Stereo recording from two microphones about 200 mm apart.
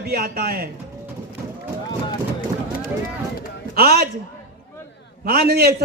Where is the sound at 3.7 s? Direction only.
50° right (ahead or behind).